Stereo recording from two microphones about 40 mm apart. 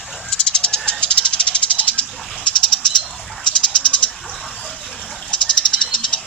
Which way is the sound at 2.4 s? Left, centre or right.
Centre.